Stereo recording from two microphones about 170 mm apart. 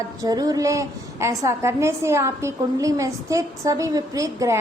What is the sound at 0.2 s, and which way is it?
A woman's voice, 20° right (ahead or behind).